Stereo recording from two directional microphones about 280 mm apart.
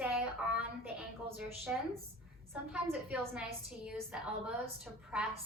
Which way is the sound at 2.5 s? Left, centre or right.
Centre.